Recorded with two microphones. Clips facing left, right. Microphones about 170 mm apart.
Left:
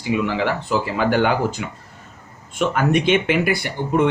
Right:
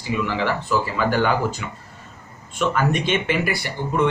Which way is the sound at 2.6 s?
55° left (ahead or behind).